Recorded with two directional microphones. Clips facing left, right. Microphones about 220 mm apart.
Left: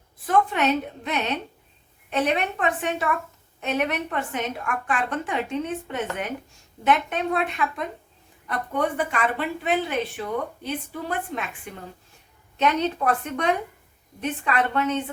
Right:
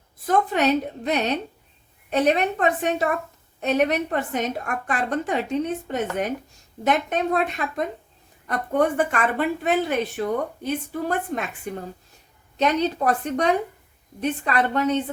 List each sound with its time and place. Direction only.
0.3 s a woman's voice: 40° right (ahead or behind)